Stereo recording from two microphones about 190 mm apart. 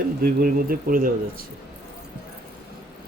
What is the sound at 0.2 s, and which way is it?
Speech, 50° right (ahead or behind).